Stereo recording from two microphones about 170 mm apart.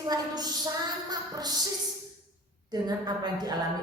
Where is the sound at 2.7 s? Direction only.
25° right (ahead or behind).